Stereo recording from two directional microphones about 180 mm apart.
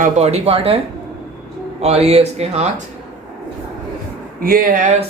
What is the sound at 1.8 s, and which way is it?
Speech, 35° right (ahead or behind).